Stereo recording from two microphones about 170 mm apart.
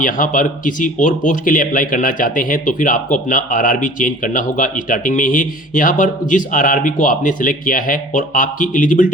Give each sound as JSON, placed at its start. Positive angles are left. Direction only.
{"t": 0.0, "sound": "speech", "side_deg": 50}